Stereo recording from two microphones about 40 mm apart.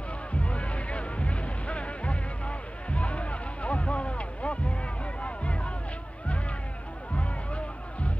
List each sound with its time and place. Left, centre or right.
0.3 s music: left
7.2 s music: left